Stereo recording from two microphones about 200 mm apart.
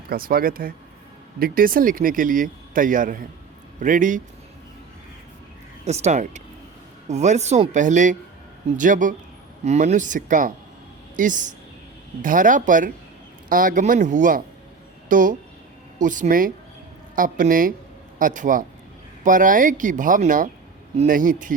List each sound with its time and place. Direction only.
0.1 s speech: 45° right (ahead or behind)
5.8 s speech: 35° right (ahead or behind)